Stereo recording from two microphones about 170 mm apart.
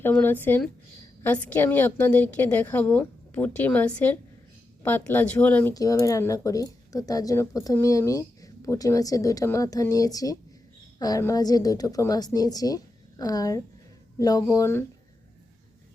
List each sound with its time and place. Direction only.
0.0 s a woman's voice: 10° left (ahead or behind)
5.7 s a woman's voice: 20° left (ahead or behind)